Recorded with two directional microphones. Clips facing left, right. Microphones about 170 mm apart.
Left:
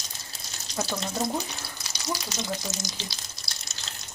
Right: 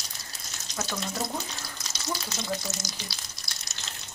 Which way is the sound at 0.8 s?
10° left (ahead or behind).